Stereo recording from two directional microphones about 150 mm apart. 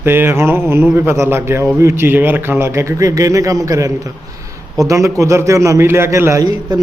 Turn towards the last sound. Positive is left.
turn(degrees=-25)  # may be behind; listen again after turning